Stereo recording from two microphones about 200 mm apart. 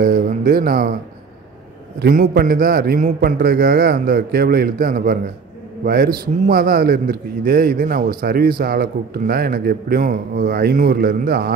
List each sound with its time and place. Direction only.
0.0 s speech: 45° right (ahead or behind)
2.0 s a man's voice: 45° right (ahead or behind)